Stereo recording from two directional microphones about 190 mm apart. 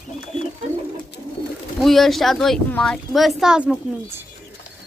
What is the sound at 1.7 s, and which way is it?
A woman's voice, centre (ahead or behind).